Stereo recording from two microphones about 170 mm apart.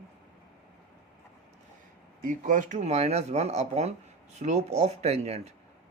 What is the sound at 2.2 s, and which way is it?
Speech, 50° right (ahead or behind).